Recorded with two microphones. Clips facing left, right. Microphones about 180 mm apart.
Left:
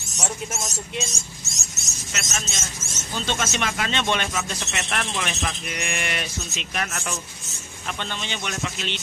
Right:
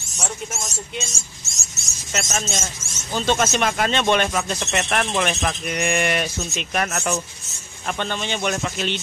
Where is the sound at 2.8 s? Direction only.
20° left (ahead or behind).